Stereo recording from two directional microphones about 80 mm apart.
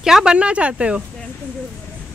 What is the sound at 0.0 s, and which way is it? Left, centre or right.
Speech, centre.